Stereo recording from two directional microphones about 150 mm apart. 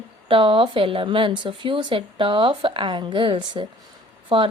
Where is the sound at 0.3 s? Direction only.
35° right (ahead or behind).